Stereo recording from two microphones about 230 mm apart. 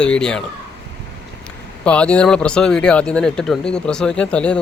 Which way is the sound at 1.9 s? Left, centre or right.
Centre.